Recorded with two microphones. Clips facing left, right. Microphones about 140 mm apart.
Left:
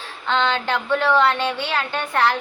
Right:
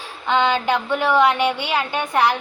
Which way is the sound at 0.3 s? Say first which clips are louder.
Right 3 dB; 15° right (ahead or behind).